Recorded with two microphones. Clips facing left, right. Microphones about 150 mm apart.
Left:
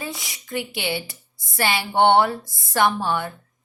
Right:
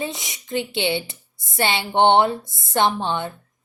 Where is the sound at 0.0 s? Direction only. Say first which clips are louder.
Right 4 dB; 20° right (ahead or behind).